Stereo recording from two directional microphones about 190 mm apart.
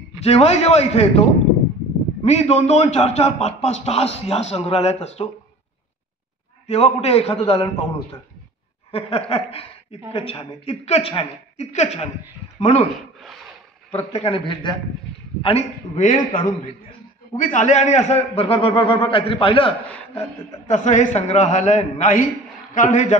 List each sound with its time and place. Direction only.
0.2 s a woman's voice: 30° left (ahead or behind)
2.2 s a woman's voice: 35° left (ahead or behind)
6.7 s a woman's voice: 35° left (ahead or behind)
8.9 s a woman's voice: 30° left (ahead or behind)
14.2 s a man's voice: 30° left (ahead or behind)
15.4 s a woman's voice: 35° left (ahead or behind)
20.6 s a woman's voice: 40° left (ahead or behind)